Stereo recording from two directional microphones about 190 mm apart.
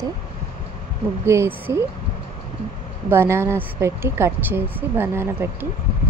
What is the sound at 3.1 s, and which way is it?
Speech, 10° right (ahead or behind).